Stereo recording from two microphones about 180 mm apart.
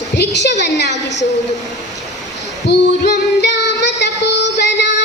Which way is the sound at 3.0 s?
65° left (ahead or behind).